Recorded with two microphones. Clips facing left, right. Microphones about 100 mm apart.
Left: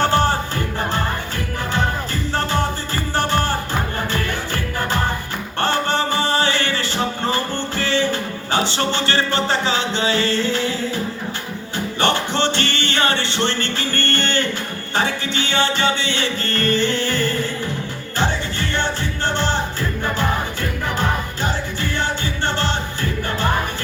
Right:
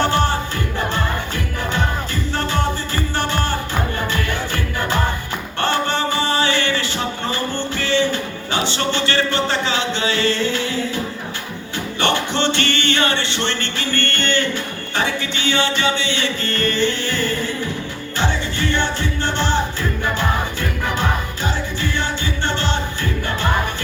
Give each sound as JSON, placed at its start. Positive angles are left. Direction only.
{"t": 0.1, "sound": "music", "side_deg": 40}
{"t": 2.3, "sound": "music", "side_deg": 40}
{"t": 11.9, "sound": "music", "side_deg": 40}
{"t": 21.4, "sound": "music", "side_deg": 45}